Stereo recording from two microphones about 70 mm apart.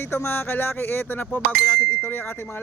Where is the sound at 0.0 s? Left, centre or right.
Left.